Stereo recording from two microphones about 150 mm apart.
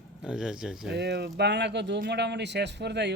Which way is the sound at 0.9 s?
90° right.